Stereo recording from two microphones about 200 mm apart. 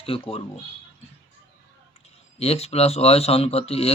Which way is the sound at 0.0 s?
30° left (ahead or behind).